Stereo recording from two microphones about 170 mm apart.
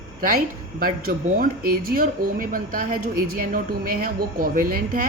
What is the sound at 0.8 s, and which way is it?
Speech, 60° right (ahead or behind).